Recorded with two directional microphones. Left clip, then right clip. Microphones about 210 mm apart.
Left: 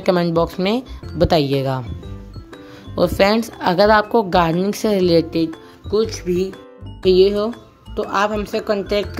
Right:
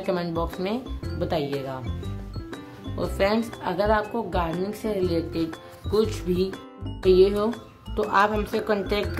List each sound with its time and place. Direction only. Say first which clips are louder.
0.0 s a woman's voice: left 10 dB; 40° left (ahead or behind)
3.0 s a woman's voice: left 9 dB; 45° left (ahead or behind)
5.9 s speech: left 5 dB; 15° left (ahead or behind)